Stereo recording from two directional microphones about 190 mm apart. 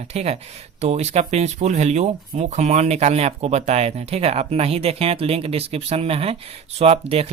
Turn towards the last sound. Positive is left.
turn(degrees=-30)  # may be behind; listen again after turning